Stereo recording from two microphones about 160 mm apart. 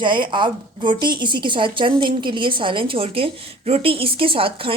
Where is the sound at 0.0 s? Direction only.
30° right (ahead or behind).